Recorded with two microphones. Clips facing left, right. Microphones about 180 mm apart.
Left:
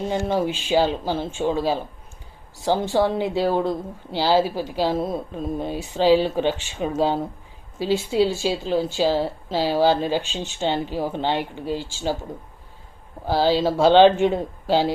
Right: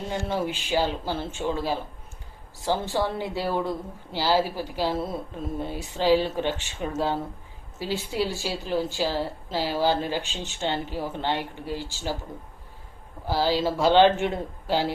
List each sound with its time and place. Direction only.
0.1 s speech: 20° left (ahead or behind)
13.2 s speech: 25° left (ahead or behind)